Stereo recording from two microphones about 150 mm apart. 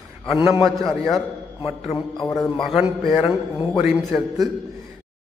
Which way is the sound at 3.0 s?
40° left (ahead or behind).